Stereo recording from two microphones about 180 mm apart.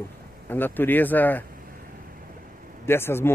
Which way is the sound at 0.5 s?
10° left (ahead or behind).